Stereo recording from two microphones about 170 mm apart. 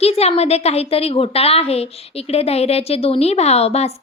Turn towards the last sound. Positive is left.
turn(degrees=40)  # may be behind; listen again after turning